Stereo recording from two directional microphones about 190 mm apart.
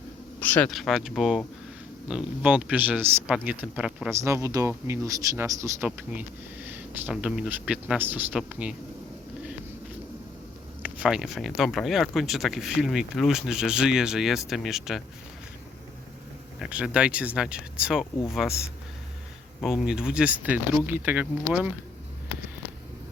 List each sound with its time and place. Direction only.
0.3 s speech: 10° left (ahead or behind)
4.1 s speech: 15° right (ahead or behind)
10.8 s speech: 5° right (ahead or behind)
16.6 s speech: 5° right (ahead or behind)
19.6 s speech: 5° right (ahead or behind)